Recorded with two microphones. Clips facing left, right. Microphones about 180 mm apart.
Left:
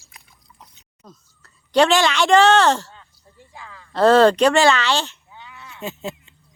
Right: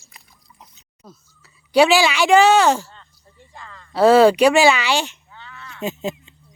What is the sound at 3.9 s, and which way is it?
Speech, 10° right (ahead or behind).